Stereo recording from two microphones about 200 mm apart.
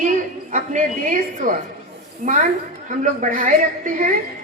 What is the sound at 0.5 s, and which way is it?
A woman's voice, 40° right (ahead or behind).